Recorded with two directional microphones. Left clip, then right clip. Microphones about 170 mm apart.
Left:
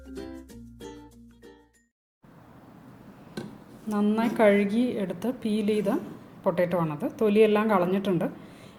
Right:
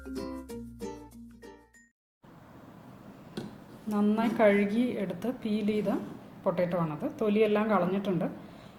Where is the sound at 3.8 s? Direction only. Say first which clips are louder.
Left 2 dB; 20° left (ahead or behind).